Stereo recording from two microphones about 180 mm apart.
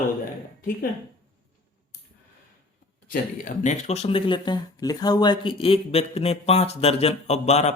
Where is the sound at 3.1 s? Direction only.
45° left (ahead or behind).